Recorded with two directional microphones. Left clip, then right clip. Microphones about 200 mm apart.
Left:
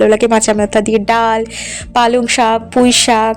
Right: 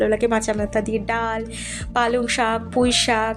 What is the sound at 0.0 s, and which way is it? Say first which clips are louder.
A woman's voice: left 9 dB; 35° left (ahead or behind).